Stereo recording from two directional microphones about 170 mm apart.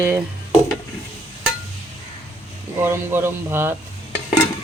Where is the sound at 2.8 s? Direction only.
15° right (ahead or behind).